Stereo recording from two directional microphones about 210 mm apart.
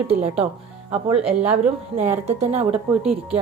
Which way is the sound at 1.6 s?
30° right (ahead or behind).